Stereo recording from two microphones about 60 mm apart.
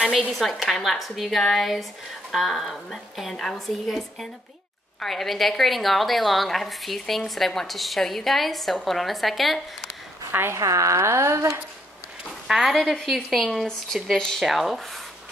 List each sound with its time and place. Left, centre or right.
0.3 s a woman's voice: centre
5.0 s a woman's voice: centre
10.3 s speech: right
10.6 s speech: right
12.4 s a woman's voice: centre